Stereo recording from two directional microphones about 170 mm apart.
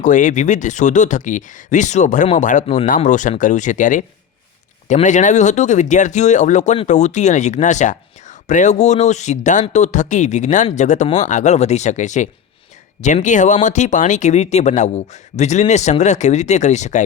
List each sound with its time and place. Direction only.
0.0 s speech: 45° left (ahead or behind)